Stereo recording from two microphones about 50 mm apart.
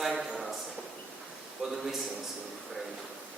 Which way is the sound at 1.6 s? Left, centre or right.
Centre.